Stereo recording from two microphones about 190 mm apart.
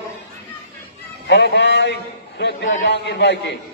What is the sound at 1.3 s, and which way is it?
A man's voice, 65° left (ahead or behind).